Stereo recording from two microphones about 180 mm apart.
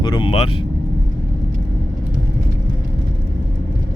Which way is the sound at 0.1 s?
30° left (ahead or behind).